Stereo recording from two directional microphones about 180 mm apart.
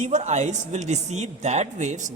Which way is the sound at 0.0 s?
40° right (ahead or behind).